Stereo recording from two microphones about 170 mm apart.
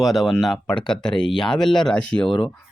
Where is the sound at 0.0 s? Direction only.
Centre (ahead or behind).